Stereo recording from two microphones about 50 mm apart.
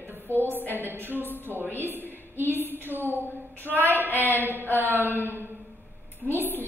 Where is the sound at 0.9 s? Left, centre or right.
Right.